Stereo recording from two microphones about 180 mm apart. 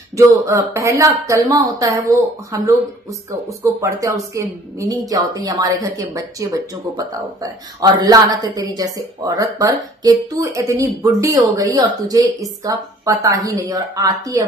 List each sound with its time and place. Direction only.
0.2 s a woman's voice: 15° right (ahead or behind)